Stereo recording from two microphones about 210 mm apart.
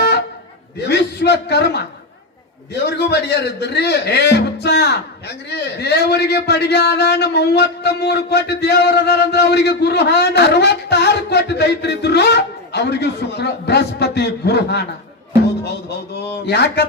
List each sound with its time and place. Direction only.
0.8 s a man's voice: 50° left (ahead or behind)
16.1 s a man's voice: 50° left (ahead or behind)